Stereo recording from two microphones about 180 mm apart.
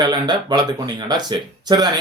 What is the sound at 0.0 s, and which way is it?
Speech, 25° right (ahead or behind).